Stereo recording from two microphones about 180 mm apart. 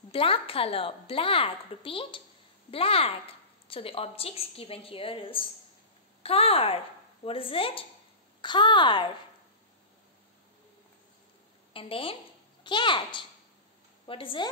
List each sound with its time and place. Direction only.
0.1 s a woman's voice: 30° left (ahead or behind)
11.7 s a woman's voice: 30° left (ahead or behind)